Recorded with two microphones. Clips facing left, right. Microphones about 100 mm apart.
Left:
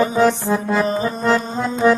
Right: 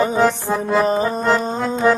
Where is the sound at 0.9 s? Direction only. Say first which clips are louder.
Right 2 dB; 40° right (ahead or behind).